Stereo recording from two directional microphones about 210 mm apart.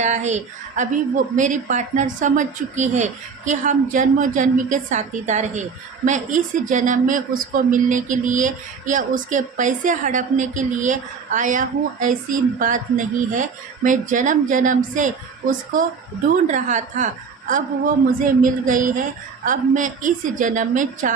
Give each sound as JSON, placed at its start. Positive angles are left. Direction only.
{"t": 0.0, "sound": "speech", "side_deg": -35}
{"t": 18.6, "sound": "speech", "side_deg": -40}